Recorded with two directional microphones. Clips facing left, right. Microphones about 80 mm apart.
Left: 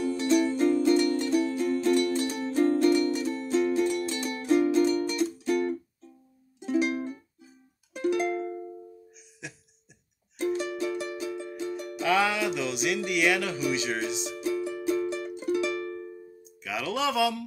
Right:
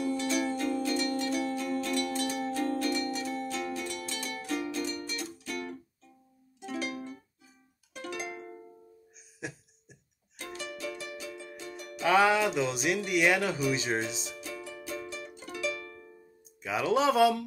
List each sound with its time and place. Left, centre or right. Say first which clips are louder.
0.6 s music: left 8 dB; left
6.6 s music: left 10 dB; left
7.9 s music: left 12 dB; centre
8.3 s music: left 11 dB; left
9.4 s a sound: right 3 dB; right
10.3 s music: left 12 dB; left
12.0 s speech: right 2 dB; right
14.3 s music: left 11 dB; left
16.6 s speech: right 3 dB; right